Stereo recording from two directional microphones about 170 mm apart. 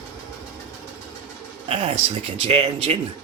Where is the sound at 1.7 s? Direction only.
35° right (ahead or behind).